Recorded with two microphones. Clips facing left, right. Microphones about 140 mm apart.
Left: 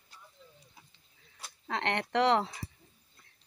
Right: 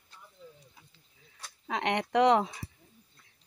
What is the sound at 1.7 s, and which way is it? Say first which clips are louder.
Speech: right 2 dB; 10° right (ahead or behind).